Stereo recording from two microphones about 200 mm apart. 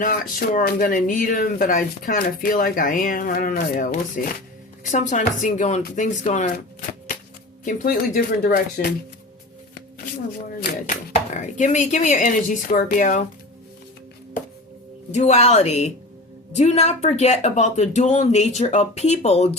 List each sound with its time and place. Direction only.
0.0 s speech: 45° left (ahead or behind)
7.6 s speech: 40° left (ahead or behind)
10.6 s speech: 50° left (ahead or behind)
11.1 s speech: 35° left (ahead or behind)
15.1 s speech: 35° left (ahead or behind)